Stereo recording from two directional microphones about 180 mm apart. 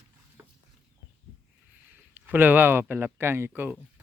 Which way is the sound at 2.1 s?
10° right (ahead or behind).